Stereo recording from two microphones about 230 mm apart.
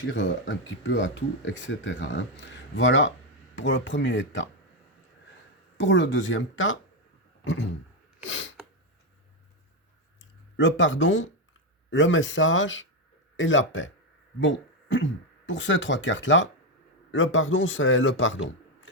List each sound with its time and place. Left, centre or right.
0.0 s speech: left
5.7 s speech: left
7.4 s a sound: left
8.2 s speech: left
10.2 s a man's voice: left